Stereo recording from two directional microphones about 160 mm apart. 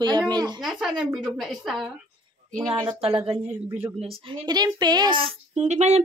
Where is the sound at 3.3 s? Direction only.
15° right (ahead or behind).